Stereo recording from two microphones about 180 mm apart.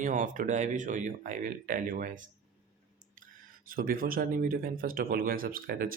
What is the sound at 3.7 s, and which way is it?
Speech, 50° right (ahead or behind).